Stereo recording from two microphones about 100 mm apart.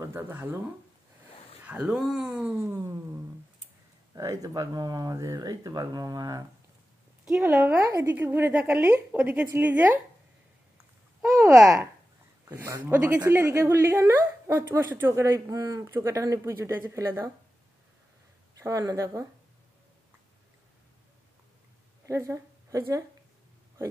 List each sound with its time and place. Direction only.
0.0 s a woman's voice: 20° right (ahead or behind)
1.6 s speech: 15° right (ahead or behind)
2.5 s speech: 30° right (ahead or behind)
7.5 s a woman's voice: 20° right (ahead or behind)
11.2 s speech: 30° right (ahead or behind)
12.8 s speech: 15° right (ahead or behind)
13.3 s a woman's voice: 30° right (ahead or behind)
18.5 s speech: 35° right (ahead or behind)
22.0 s speech: 30° right (ahead or behind)